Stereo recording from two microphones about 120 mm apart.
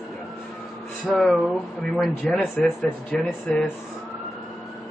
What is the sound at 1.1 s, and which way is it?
Speech, 5° left (ahead or behind).